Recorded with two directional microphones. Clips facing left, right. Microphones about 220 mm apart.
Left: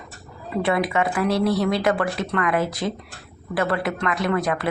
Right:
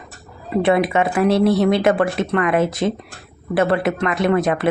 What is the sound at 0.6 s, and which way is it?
A woman's voice, 25° right (ahead or behind).